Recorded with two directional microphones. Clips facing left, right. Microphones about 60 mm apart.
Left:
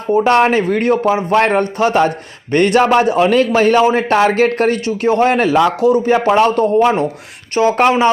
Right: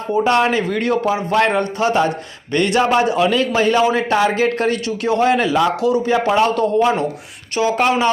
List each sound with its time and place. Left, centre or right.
0.1 s a man's voice: left